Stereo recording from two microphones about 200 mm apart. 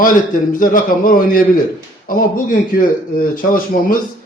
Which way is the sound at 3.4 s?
45° left (ahead or behind).